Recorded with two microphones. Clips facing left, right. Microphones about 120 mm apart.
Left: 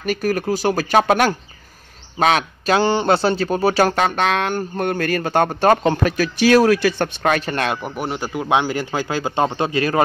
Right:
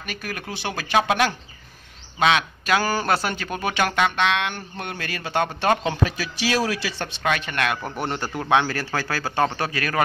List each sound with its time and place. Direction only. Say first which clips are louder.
0.0 s a man's voice: left 13 dB; 40° left (ahead or behind)
7.8 s speech: left 3 dB; 10° left (ahead or behind); by 10.0 s 25° left (ahead or behind)